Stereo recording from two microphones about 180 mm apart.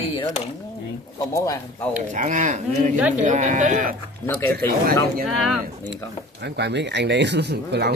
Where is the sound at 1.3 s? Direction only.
15° left (ahead or behind).